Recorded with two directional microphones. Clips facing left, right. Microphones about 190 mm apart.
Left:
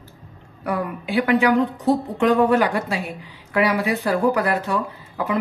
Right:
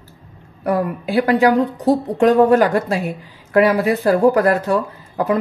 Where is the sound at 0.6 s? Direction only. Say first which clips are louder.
Right 6 dB; 40° right (ahead or behind).